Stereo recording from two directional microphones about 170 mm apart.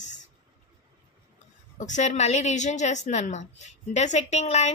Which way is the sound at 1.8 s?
45° left (ahead or behind).